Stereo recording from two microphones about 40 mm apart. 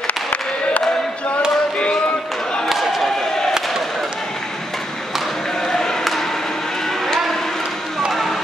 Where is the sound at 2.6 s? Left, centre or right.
Centre.